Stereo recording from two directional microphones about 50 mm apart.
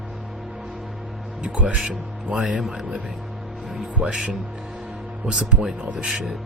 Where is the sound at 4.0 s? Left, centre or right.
Right.